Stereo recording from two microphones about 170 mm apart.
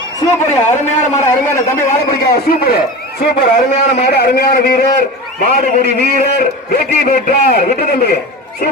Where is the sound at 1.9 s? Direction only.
55° left (ahead or behind).